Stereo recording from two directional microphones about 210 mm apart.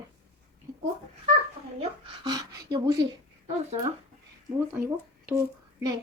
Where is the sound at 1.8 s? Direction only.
25° right (ahead or behind).